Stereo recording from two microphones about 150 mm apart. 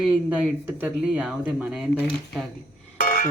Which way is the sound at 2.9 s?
60° left (ahead or behind).